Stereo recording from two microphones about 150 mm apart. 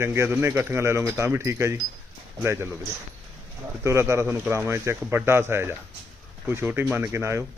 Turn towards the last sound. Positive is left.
turn(degrees=-20)  # may be behind; listen again after turning